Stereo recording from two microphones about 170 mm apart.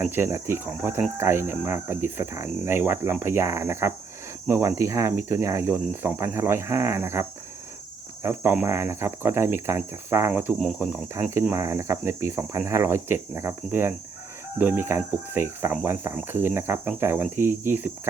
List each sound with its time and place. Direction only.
0.1 s speech: 15° right (ahead or behind)
11.1 s speech: 15° right (ahead or behind)